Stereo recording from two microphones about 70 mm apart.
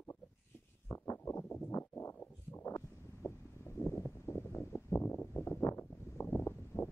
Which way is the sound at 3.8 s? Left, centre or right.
Left.